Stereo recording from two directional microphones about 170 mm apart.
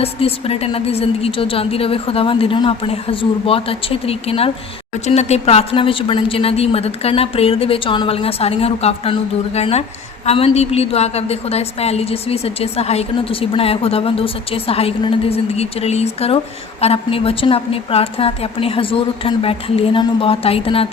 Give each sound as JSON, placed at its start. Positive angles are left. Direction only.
{"t": 0.0, "sound": "a woman's voice", "side_deg": 35}